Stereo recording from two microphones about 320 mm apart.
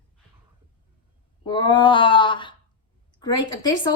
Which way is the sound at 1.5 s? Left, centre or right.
Centre.